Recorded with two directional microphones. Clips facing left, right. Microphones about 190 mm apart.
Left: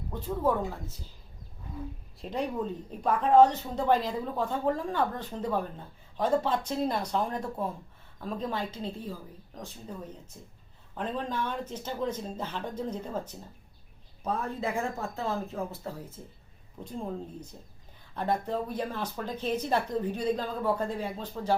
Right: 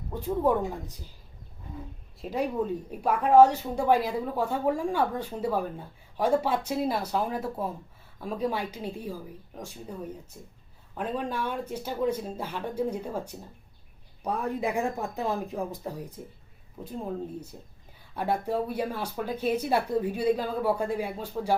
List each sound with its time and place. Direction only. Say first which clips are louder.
0.1 s speech: right 3 dB; 15° right (ahead or behind)
2.2 s speech: right 3 dB; 5° right (ahead or behind)
10.9 s speech: right 2 dB; 10° right (ahead or behind)
16.8 s speech: right 2 dB; 5° right (ahead or behind)